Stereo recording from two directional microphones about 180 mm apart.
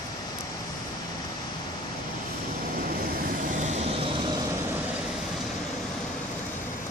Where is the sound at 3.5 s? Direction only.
40° right (ahead or behind).